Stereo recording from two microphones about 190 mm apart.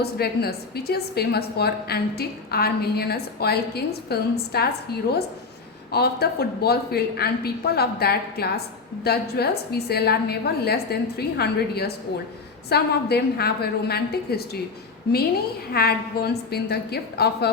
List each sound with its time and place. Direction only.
0.0 s a woman's voice: 55° left (ahead or behind)
5.9 s a woman's voice: 55° left (ahead or behind)
15.7 s a woman's voice: 55° left (ahead or behind)